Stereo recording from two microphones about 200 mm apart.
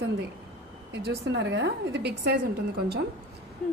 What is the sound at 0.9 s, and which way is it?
Speech, 60° right (ahead or behind).